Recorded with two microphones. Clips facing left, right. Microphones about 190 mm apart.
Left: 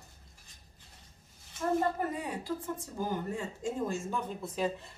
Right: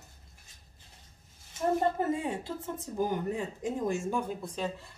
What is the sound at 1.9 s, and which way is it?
Speech, 25° right (ahead or behind).